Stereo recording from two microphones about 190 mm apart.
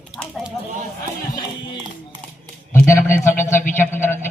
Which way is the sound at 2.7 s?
15° left (ahead or behind).